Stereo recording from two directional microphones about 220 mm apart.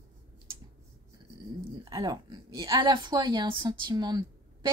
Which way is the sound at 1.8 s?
15° right (ahead or behind).